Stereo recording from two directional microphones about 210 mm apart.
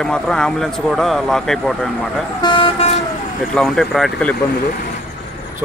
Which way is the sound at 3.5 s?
Centre (ahead or behind).